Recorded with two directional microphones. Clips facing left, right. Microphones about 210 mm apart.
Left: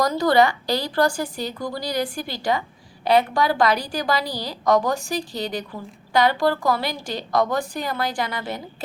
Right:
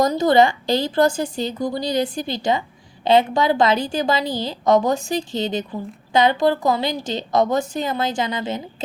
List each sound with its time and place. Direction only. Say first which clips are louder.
0.0 s a woman's voice: right 3 dB; 20° right (ahead or behind)